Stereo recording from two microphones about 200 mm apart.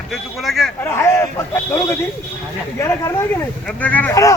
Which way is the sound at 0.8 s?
10° left (ahead or behind).